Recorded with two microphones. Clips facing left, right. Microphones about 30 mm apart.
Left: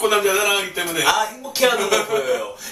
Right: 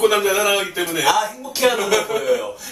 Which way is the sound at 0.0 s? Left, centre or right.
Centre.